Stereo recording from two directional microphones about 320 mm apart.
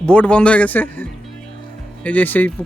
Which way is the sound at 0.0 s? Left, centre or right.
Centre.